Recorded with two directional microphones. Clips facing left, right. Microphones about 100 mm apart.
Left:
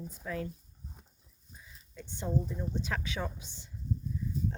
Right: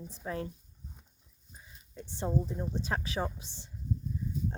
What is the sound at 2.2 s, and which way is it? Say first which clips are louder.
Speech: right 1 dB; 40° right (ahead or behind).